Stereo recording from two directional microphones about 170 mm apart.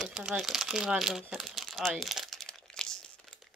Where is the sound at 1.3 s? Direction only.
Centre (ahead or behind).